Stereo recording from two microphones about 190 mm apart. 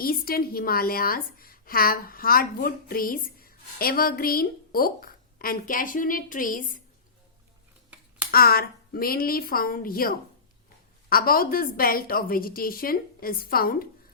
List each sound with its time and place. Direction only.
0.0 s a woman's voice: 50° left (ahead or behind)
8.3 s a woman's voice: 50° left (ahead or behind)